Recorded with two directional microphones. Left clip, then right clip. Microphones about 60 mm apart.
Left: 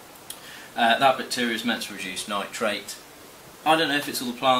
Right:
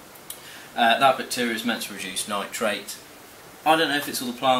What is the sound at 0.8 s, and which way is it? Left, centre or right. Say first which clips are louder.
Speech: right 1 dB; centre.